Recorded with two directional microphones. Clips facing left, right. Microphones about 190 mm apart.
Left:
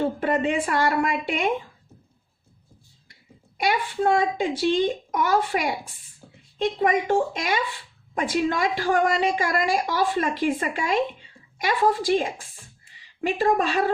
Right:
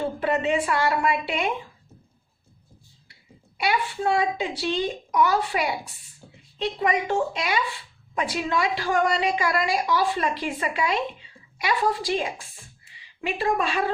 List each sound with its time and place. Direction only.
0.2 s a woman's voice: 50° left (ahead or behind)
3.6 s a woman's voice: 45° left (ahead or behind)